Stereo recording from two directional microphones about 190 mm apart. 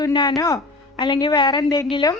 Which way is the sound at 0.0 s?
20° left (ahead or behind).